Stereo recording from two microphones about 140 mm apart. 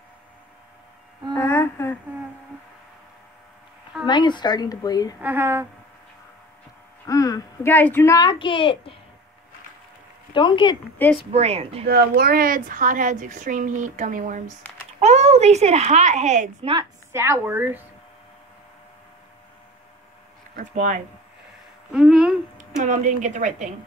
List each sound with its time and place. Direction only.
1.3 s a sound: 20° left (ahead or behind)
4.0 s a woman's voice: 35° left (ahead or behind)
5.2 s speech: 15° right (ahead or behind)
7.1 s a woman's voice: 25° left (ahead or behind)
7.7 s a woman's voice: 15° left (ahead or behind); by 8.9 s 40° left (ahead or behind)
10.3 s a woman's voice: 35° left (ahead or behind)
11.0 s speech: 10° left (ahead or behind)
11.3 s a woman's voice: 50° right (ahead or behind)
11.8 s a woman's voice: 90° right; by 14.4 s 65° right (ahead or behind)
15.0 s speech: 55° right (ahead or behind)
17.1 s speech: 20° right (ahead or behind)
20.5 s a woman's voice: 60° right (ahead or behind)
21.9 s a sound: 5° right (ahead or behind)
22.8 s a woman's voice: 65° right (ahead or behind)